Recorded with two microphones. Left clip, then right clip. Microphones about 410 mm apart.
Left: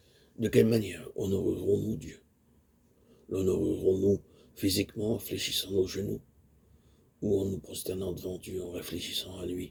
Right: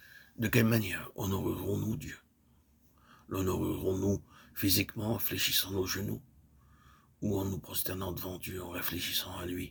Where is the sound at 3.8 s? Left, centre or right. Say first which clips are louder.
Left 7 dB; right.